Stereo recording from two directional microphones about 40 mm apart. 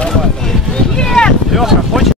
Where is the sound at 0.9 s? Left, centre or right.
Centre.